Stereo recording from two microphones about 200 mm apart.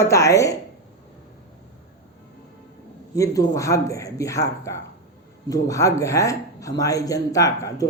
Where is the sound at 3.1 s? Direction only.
15° left (ahead or behind).